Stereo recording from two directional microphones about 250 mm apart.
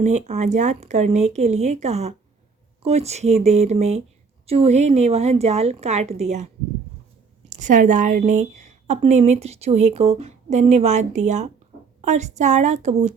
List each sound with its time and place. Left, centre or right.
0.0 s a woman's voice: right
7.5 s a woman's voice: right